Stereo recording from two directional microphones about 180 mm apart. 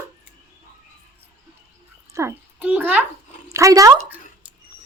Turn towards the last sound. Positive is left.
turn(degrees=-15)  # may be behind; listen again after turning